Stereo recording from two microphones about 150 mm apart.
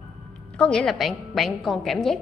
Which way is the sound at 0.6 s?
5° left (ahead or behind).